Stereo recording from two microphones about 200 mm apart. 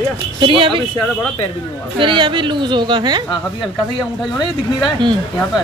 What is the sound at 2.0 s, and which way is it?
Speech, 25° right (ahead or behind).